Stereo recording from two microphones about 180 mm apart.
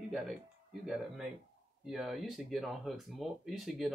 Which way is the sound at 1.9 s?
Centre (ahead or behind).